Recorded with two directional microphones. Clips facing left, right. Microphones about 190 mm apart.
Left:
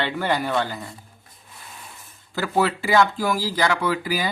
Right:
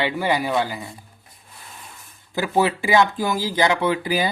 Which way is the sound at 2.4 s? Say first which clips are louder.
Right 2 dB; 15° right (ahead or behind).